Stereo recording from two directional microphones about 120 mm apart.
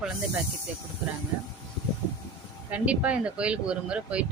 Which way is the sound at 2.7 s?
10° right (ahead or behind).